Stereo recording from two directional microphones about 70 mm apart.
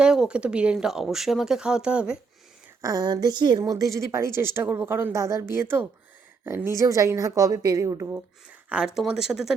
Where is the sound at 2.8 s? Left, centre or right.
Right.